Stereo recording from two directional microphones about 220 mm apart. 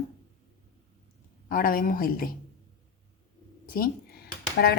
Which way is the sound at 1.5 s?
40° left (ahead or behind).